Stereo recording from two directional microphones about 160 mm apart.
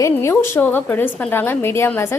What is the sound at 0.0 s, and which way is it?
A woman's voice, 15° left (ahead or behind).